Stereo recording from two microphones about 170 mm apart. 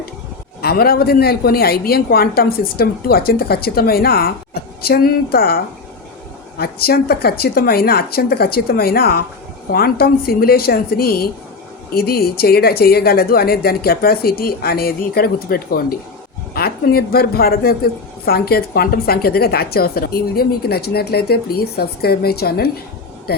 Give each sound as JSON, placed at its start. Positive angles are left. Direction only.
{"t": 0.6, "sound": "a woman's voice", "side_deg": 65}
{"t": 6.6, "sound": "a woman's voice", "side_deg": 65}